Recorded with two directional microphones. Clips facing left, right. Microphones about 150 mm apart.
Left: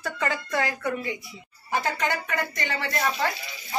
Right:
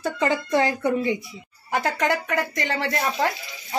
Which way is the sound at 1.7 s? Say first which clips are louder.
Right 3 dB; 75° right (ahead or behind).